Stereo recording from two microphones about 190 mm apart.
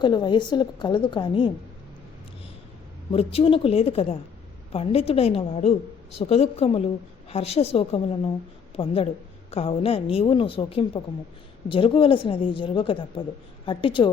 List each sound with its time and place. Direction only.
0.0 s a woman's voice: 25° left (ahead or behind)
3.3 s a woman's voice: 30° left (ahead or behind)